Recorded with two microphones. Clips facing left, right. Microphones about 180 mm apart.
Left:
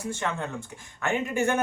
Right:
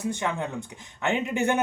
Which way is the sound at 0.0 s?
15° right (ahead or behind).